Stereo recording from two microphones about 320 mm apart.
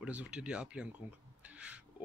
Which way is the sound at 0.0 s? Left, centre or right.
Centre.